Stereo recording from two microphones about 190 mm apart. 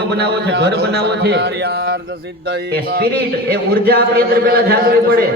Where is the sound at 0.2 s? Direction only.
60° right (ahead or behind).